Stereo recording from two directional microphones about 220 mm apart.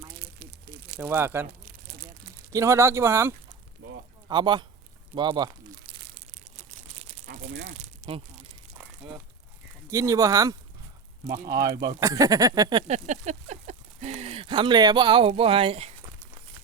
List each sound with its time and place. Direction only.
0.2 s crumpling: 45° right (ahead or behind)
0.9 s speech: 10° right (ahead or behind)
2.5 s a man's voice: 10° right (ahead or behind)
5.1 s crumpling: 20° right (ahead or behind)
7.7 s a sound: 25° right (ahead or behind)
9.9 s speech: 15° right (ahead or behind)
12.9 s speech: 30° right (ahead or behind)